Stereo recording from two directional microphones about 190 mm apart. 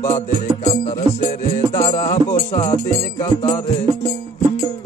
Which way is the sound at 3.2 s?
20° left (ahead or behind).